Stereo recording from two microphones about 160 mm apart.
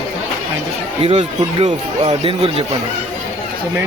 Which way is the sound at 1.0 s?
40° right (ahead or behind).